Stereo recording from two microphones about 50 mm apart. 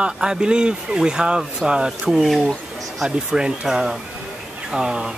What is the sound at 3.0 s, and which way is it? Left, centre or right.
Speech, centre.